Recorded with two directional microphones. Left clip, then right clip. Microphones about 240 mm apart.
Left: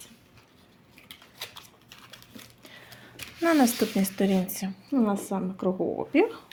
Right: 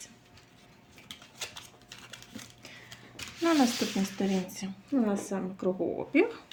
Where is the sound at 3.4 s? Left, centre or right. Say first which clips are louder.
Left 4 dB; left.